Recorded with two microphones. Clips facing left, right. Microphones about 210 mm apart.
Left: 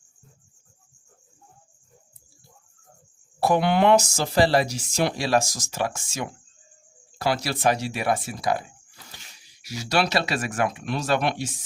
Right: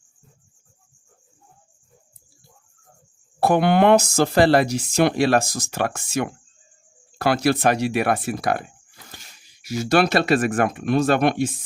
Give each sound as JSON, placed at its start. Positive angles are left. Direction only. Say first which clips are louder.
{"t": 3.4, "sound": "speech", "louder": "right 3 dB", "side_deg": -55}